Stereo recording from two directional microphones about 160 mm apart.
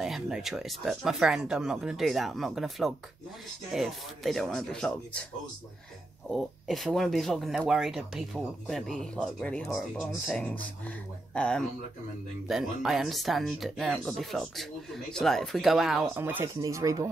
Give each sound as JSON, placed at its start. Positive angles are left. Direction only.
{"t": 0.0, "sound": "speech", "side_deg": 0}
{"t": 6.3, "sound": "speech", "side_deg": 0}
{"t": 16.2, "sound": "speech", "side_deg": -15}